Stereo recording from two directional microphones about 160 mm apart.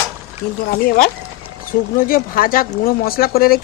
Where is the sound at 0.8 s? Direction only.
60° left (ahead or behind).